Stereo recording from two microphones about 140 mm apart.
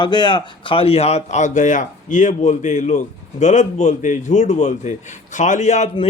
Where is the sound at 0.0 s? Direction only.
35° left (ahead or behind).